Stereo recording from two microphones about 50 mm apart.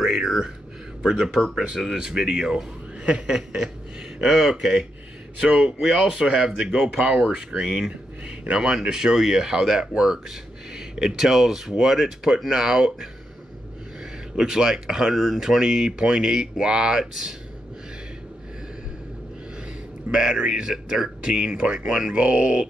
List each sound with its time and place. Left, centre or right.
0.0 s a sound: centre
1.0 s speech: centre
5.4 s speech: right
14.3 s speech: centre
20.1 s speech: centre